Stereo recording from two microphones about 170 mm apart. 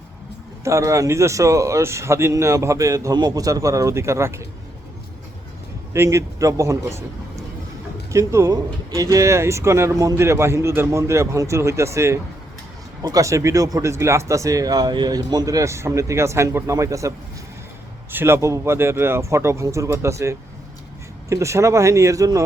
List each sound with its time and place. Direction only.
0.6 s speech: 20° right (ahead or behind)
5.9 s speech: 15° right (ahead or behind)
8.1 s speech: 15° right (ahead or behind)